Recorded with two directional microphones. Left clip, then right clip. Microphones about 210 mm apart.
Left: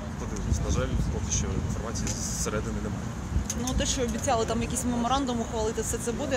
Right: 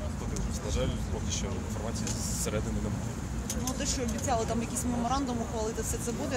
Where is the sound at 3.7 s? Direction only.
40° left (ahead or behind).